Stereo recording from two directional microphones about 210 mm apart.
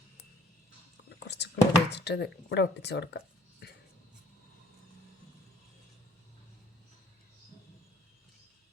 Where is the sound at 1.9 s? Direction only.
55° left (ahead or behind).